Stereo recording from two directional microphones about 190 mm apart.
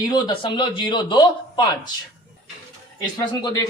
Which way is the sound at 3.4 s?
20° left (ahead or behind).